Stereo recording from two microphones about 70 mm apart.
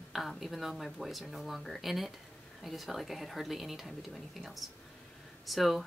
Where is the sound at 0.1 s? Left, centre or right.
Centre.